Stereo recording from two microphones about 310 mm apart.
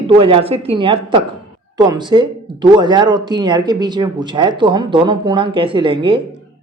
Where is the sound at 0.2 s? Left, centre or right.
Centre.